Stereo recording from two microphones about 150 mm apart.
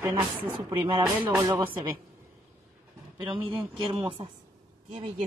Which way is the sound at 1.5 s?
30° right (ahead or behind).